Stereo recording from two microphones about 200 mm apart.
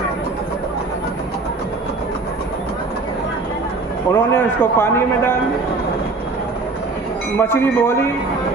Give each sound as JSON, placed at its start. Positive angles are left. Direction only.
{"t": 4.1, "sound": "a man's voice", "side_deg": 10}
{"t": 7.3, "sound": "a man's voice", "side_deg": 10}